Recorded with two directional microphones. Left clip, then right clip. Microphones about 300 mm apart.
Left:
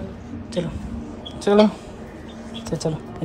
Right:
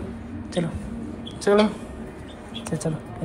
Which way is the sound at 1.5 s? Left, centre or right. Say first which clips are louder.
Left 2 dB; centre.